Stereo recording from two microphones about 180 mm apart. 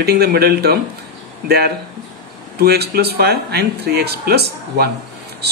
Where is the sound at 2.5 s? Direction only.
65° right (ahead or behind).